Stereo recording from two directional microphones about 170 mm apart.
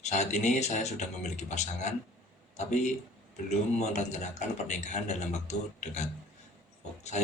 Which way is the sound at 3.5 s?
45° left (ahead or behind).